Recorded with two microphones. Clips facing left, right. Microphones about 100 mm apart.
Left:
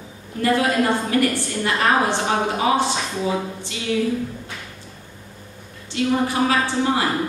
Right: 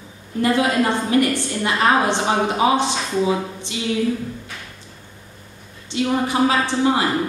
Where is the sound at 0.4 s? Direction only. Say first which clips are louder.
Right 1 dB; 20° right (ahead or behind).